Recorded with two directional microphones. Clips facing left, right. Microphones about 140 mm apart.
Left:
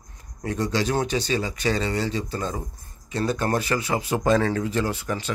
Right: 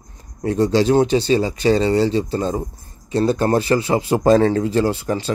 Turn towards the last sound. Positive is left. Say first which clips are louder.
# right 7 dB
turn(degrees=-30)  # may be behind; listen again after turning